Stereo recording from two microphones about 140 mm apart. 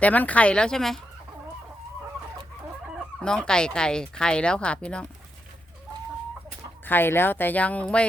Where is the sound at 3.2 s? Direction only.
5° left (ahead or behind).